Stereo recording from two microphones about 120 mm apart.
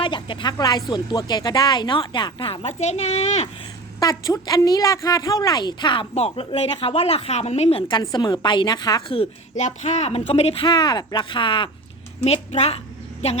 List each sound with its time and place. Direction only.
0.0 s speech: 45° left (ahead or behind); by 3.5 s 65° left (ahead or behind)
4.0 s speech: 30° left (ahead or behind)
6.1 s speech: 55° left (ahead or behind); by 9.1 s 35° left (ahead or behind)
9.6 s speech: 70° left (ahead or behind); by 11.7 s 45° left (ahead or behind)
12.2 s a woman's voice: 60° left (ahead or behind)